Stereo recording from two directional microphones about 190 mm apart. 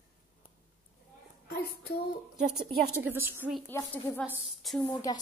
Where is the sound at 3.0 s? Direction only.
10° right (ahead or behind).